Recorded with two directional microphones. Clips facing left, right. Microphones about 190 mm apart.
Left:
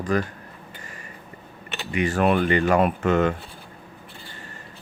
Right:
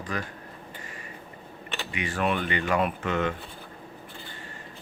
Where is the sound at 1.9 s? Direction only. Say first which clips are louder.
Left 7 dB; 45° left (ahead or behind).